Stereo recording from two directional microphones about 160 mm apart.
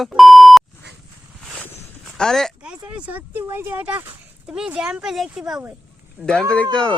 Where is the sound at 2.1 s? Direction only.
5° left (ahead or behind).